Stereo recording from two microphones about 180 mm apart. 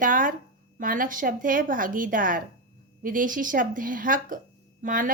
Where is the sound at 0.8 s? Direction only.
50° right (ahead or behind).